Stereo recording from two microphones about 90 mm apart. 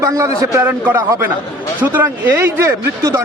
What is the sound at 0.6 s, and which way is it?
A man's voice, 20° right (ahead or behind).